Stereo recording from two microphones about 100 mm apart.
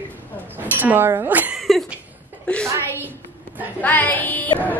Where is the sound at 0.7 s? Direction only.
20° right (ahead or behind).